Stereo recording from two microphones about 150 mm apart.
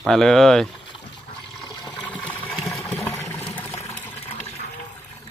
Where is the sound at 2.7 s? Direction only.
15° left (ahead or behind).